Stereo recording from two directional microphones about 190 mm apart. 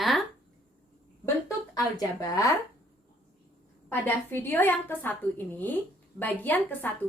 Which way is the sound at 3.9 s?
10° left (ahead or behind).